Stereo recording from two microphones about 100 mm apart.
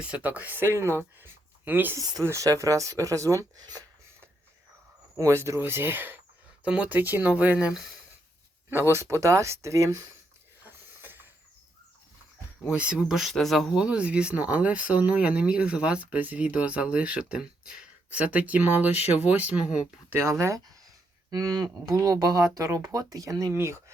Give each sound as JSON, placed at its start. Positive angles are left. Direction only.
{"t": 0.0, "sound": "speech", "side_deg": -15}
{"t": 2.0, "sound": "speech", "side_deg": -35}
{"t": 5.1, "sound": "speech", "side_deg": -30}
{"t": 8.9, "sound": "speech", "side_deg": -30}
{"t": 10.7, "sound": "a sound", "side_deg": -20}
{"t": 12.6, "sound": "speech", "side_deg": -10}
{"t": 20.1, "sound": "speech", "side_deg": -25}